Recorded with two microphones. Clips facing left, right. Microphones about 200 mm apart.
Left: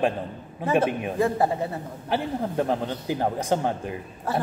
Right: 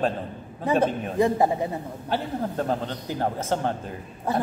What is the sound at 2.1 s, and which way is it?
A man's voice, 15° left (ahead or behind).